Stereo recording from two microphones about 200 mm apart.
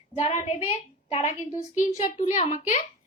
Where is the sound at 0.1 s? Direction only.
30° left (ahead or behind).